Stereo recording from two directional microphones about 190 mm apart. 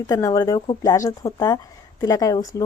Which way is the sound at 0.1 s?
20° left (ahead or behind).